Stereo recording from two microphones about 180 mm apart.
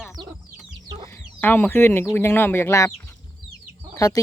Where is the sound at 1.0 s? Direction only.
10° left (ahead or behind).